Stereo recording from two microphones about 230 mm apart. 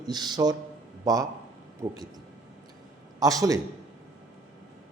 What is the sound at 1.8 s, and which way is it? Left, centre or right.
Speech, centre.